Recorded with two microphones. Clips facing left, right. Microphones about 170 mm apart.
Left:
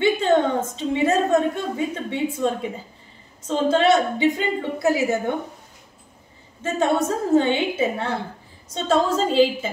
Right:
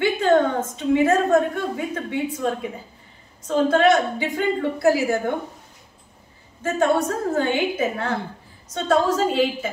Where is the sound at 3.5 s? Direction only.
25° left (ahead or behind).